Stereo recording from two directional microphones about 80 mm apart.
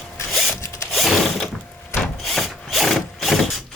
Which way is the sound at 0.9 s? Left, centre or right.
Centre.